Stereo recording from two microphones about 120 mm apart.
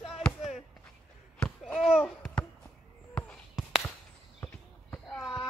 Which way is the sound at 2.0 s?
5° left (ahead or behind).